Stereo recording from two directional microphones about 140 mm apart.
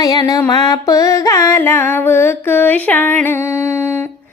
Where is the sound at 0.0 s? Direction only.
25° left (ahead or behind).